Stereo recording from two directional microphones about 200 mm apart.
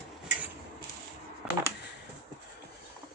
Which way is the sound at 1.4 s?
Centre (ahead or behind).